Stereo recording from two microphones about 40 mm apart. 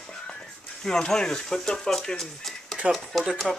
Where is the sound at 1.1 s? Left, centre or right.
Centre.